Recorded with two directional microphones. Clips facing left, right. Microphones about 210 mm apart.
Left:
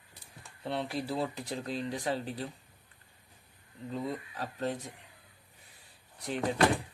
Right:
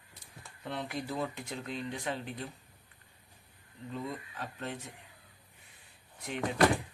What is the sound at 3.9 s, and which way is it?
Speech, 35° left (ahead or behind).